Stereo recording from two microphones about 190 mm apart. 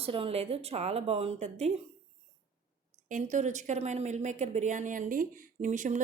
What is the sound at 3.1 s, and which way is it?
A woman's voice, 40° right (ahead or behind).